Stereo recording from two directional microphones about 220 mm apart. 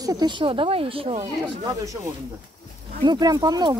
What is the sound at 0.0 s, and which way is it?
Speech, 15° right (ahead or behind).